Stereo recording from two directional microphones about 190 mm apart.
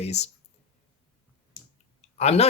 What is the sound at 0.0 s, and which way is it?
Speech, 35° left (ahead or behind).